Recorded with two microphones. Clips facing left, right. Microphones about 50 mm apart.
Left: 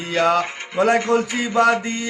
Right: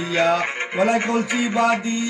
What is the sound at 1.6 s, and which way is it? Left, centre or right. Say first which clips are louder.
Mantra: left 4 dB; left.